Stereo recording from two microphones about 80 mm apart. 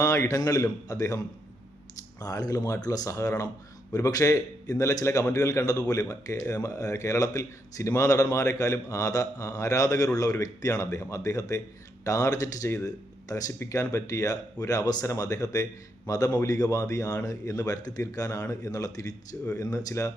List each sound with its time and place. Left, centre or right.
0.0 s speech: left
2.2 s speech: left